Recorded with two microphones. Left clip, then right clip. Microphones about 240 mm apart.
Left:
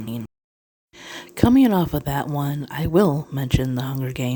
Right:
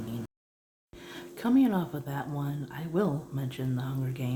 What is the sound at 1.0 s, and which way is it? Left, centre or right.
Speech, left.